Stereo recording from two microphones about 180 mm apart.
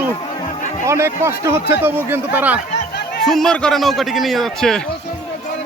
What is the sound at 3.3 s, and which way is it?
A man's voice, 5° left (ahead or behind).